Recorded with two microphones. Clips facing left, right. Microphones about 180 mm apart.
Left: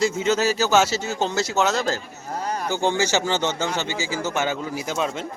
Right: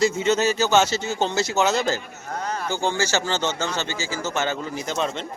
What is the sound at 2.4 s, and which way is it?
A man's voice, 15° left (ahead or behind).